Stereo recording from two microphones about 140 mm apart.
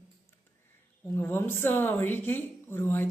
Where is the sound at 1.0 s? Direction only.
15° left (ahead or behind).